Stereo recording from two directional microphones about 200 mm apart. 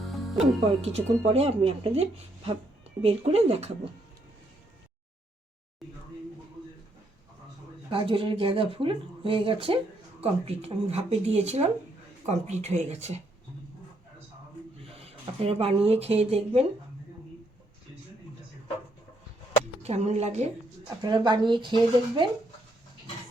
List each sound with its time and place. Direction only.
0.0 s music: centre (ahead or behind)
1.3 s speech: 30° right (ahead or behind)
7.9 s speech: 25° right (ahead or behind)
14.9 s speech: 30° right (ahead or behind)
19.8 s speech: 35° right (ahead or behind)
21.0 s speech: 20° right (ahead or behind)